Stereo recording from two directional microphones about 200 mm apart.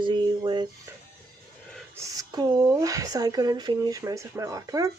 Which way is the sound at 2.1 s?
20° right (ahead or behind).